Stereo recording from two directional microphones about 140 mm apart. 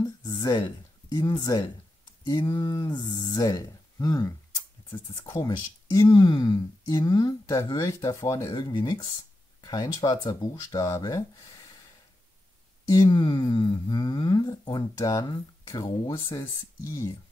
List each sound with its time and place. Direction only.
0.0 s a sound: 30° left (ahead or behind)
2.2 s speech: 30° left (ahead or behind)
12.9 s speech: 30° left (ahead or behind)